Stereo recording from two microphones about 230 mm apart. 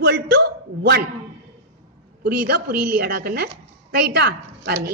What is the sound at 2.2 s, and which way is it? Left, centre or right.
A woman's voice, right.